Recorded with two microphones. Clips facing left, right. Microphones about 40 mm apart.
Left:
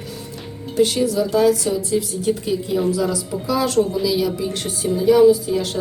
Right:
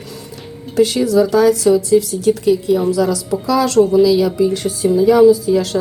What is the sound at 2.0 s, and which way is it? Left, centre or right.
Speech, right.